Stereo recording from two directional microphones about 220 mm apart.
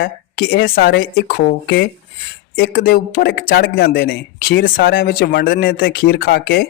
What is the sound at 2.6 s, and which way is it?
Speech, 40° left (ahead or behind).